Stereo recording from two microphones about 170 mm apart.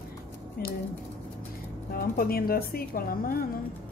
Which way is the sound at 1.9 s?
60° left (ahead or behind).